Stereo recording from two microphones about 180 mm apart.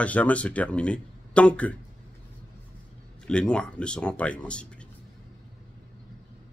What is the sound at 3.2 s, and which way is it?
Speech, 5° left (ahead or behind).